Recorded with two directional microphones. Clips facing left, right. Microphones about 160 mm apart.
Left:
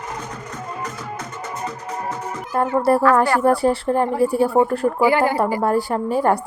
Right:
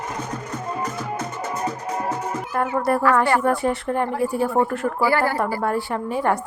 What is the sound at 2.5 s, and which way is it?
A woman's voice, 30° left (ahead or behind).